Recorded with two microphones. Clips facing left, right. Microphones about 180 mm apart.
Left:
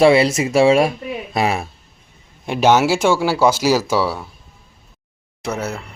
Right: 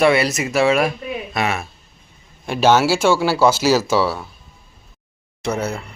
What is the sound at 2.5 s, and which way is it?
Speech, 15° left (ahead or behind).